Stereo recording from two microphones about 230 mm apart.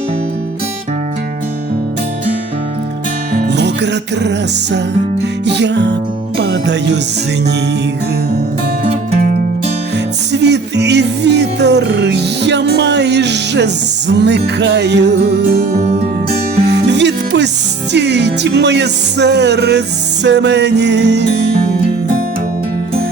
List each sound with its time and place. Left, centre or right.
3.3 s music: right
8.8 s music: right
10.3 s music: right
15.8 s music: right
16.6 s music: right